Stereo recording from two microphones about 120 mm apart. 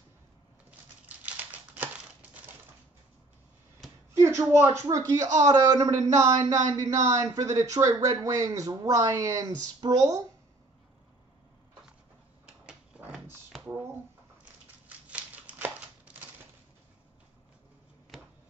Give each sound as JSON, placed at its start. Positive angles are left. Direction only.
{"t": 1.0, "sound": "typewriter", "side_deg": -15}
{"t": 4.2, "sound": "speech", "side_deg": -25}
{"t": 12.6, "sound": "a sound", "side_deg": -5}
{"t": 15.0, "sound": "crumpling", "side_deg": -10}